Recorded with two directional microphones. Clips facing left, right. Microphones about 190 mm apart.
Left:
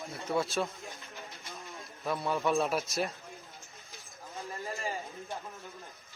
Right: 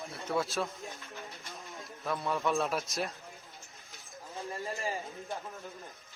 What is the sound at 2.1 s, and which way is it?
Speech, centre (ahead or behind).